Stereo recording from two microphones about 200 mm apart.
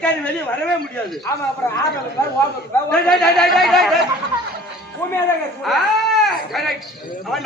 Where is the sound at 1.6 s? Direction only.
15° left (ahead or behind).